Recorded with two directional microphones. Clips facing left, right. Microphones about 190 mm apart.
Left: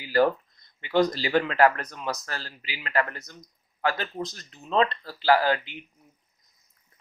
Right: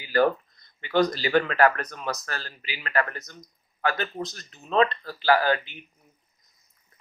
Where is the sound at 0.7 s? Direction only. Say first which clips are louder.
Even; 25° left (ahead or behind).